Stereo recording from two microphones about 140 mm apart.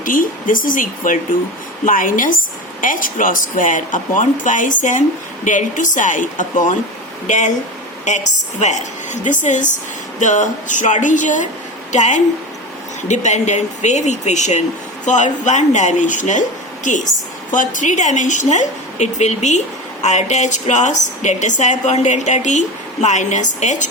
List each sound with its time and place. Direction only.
0.0 s a woman's voice: 75° left (ahead or behind)